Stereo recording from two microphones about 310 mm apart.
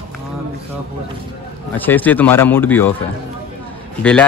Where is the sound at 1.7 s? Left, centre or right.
Centre.